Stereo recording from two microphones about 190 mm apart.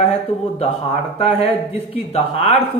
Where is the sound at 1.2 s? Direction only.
30° left (ahead or behind).